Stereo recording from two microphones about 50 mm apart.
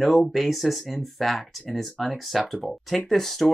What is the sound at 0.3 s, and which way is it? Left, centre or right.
Speech, centre.